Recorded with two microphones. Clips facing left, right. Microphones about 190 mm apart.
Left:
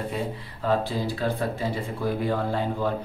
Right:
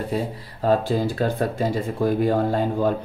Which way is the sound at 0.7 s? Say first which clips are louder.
Right 5 dB; 45° right (ahead or behind).